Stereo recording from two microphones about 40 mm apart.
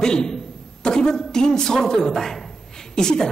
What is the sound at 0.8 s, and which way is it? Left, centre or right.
A man's voice, centre.